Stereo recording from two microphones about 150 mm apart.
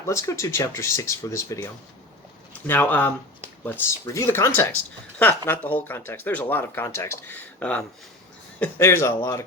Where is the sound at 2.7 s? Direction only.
10° left (ahead or behind).